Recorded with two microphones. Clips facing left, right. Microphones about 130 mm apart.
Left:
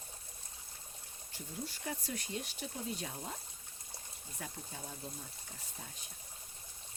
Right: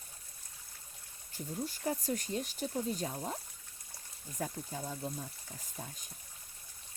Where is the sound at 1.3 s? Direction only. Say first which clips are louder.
Right 5 dB; 45° right (ahead or behind).